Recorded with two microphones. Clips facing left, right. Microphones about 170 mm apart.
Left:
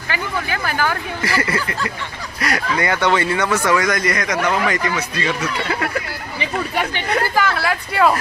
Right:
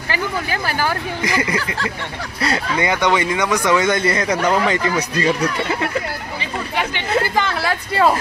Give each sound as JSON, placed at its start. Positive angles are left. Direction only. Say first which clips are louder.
{"t": 0.8, "sound": "speech", "louder": "right 1 dB", "side_deg": -15}
{"t": 7.1, "sound": "speech", "louder": "even", "side_deg": -25}